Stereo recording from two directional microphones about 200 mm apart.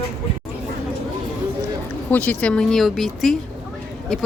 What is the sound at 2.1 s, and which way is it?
Speech, 5° left (ahead or behind).